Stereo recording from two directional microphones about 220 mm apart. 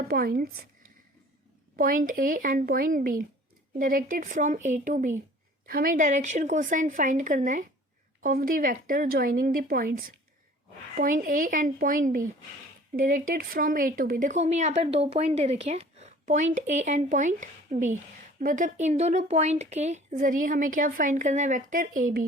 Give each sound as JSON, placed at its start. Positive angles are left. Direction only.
{"t": 0.1, "sound": "speech", "side_deg": -45}
{"t": 1.7, "sound": "a woman's voice", "side_deg": -40}